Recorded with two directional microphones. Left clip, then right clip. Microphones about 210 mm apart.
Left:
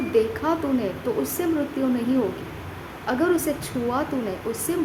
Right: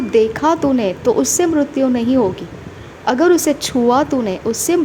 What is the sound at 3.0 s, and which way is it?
A woman's voice, 35° right (ahead or behind).